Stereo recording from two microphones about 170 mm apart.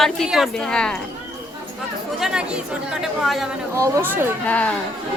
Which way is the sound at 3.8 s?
15° right (ahead or behind).